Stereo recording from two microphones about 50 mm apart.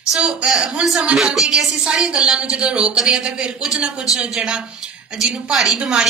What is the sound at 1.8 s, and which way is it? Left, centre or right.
A woman's voice, centre.